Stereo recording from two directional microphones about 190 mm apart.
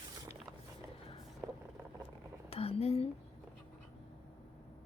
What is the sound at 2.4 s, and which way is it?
Speech, 30° left (ahead or behind).